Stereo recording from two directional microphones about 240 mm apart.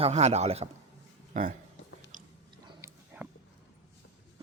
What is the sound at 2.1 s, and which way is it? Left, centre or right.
Biting, right.